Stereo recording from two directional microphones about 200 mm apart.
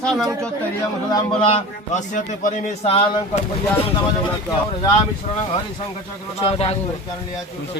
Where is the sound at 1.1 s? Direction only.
25° left (ahead or behind).